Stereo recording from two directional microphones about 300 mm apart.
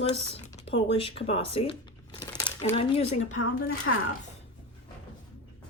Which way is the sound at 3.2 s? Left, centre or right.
Left.